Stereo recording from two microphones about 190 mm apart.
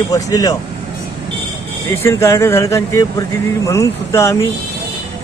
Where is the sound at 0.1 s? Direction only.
20° left (ahead or behind).